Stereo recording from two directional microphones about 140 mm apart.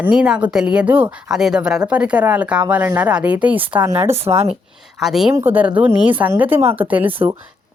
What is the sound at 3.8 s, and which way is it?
Speech, 30° right (ahead or behind).